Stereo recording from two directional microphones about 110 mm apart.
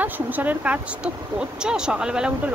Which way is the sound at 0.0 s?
15° right (ahead or behind).